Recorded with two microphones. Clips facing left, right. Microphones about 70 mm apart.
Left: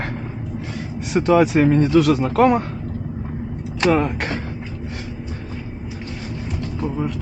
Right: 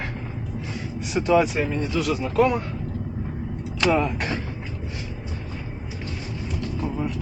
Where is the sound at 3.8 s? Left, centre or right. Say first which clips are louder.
Left 3 dB; left.